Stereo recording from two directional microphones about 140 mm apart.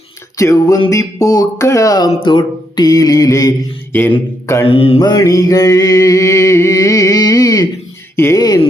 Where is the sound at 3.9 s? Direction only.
15° left (ahead or behind).